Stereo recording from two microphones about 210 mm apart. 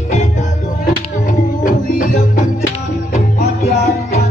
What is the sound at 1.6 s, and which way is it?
Music, 40° left (ahead or behind).